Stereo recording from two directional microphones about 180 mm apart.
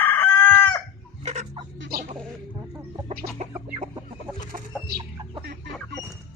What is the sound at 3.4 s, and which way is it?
Chicken, 40° right (ahead or behind).